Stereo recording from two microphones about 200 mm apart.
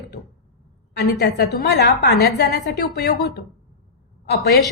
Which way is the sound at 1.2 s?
50° left (ahead or behind).